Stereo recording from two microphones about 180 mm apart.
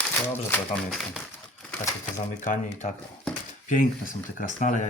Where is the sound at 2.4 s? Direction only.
45° left (ahead or behind).